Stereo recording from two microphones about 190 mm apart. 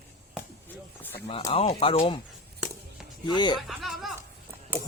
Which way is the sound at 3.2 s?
25° left (ahead or behind).